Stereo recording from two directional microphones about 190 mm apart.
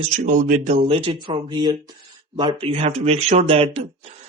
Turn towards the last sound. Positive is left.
turn(degrees=-30)  # may be behind; listen again after turning